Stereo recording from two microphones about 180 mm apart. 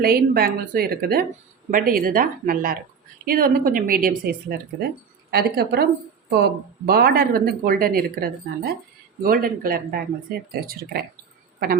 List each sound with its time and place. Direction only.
0.0 s a woman's voice: 55° right (ahead or behind)